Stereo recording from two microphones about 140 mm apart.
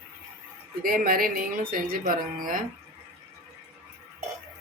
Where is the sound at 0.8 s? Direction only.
90° right; by 2.6 s 75° right (ahead or behind).